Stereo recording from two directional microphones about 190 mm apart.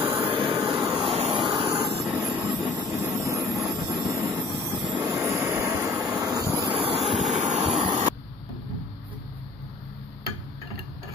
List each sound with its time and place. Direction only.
0.2 s vehicle: 25° right (ahead or behind)
2.0 s vehicle: 10° right (ahead or behind); by 7.8 s 35° right (ahead or behind)